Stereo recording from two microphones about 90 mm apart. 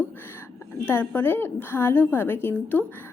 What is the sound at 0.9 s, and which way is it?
A woman's voice, 25° left (ahead or behind).